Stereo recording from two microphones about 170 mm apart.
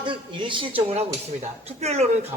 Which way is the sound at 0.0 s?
30° right (ahead or behind).